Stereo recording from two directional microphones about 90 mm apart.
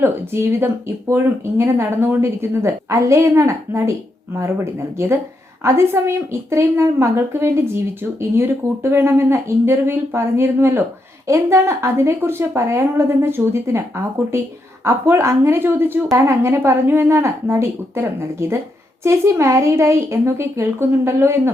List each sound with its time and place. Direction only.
0.0 s a woman's voice: 30° right (ahead or behind)